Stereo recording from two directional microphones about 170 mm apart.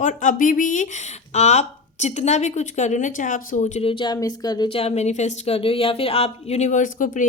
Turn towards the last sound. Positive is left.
turn(degrees=50)  # may be behind; listen again after turning